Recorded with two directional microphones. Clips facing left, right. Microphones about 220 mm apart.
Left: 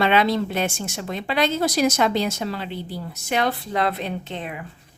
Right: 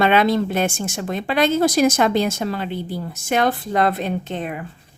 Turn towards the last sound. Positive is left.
turn(degrees=-45)  # may be behind; listen again after turning